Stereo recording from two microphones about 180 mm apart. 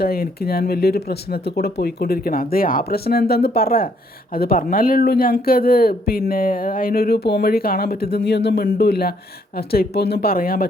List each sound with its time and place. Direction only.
0.0 s speech: 60° left (ahead or behind)